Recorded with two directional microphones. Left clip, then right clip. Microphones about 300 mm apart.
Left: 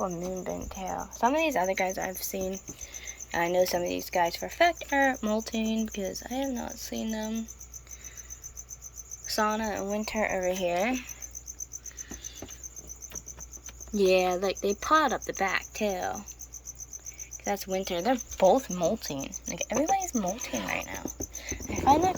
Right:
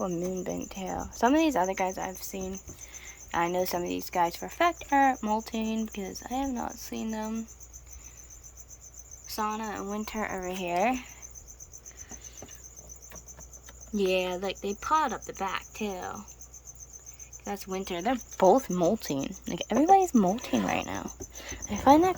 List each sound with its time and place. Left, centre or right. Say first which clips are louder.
0.0 s speech: even; right
2.9 s cricket: right 1 dB; centre
3.8 s speech: left 1 dB; centre
9.2 s speech: left 4 dB; centre
13.9 s speech: left 4 dB; centre
17.4 s speech: left 5 dB; centre; by 22.1 s right